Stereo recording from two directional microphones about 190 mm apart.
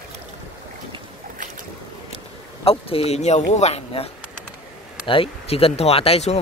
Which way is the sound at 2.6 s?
30° left (ahead or behind).